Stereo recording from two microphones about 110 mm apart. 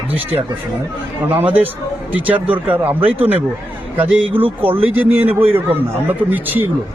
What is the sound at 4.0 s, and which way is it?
Speech, 15° right (ahead or behind).